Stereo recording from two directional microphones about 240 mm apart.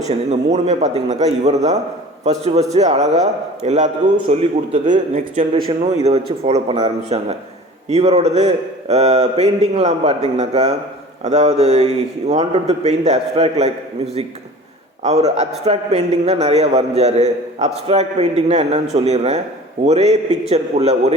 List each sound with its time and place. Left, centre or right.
0.0 s a man's voice: right